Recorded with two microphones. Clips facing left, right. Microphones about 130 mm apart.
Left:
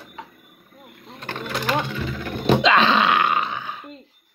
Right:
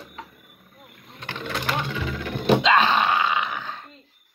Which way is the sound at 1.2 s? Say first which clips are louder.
Left 3 dB; 45° left (ahead or behind).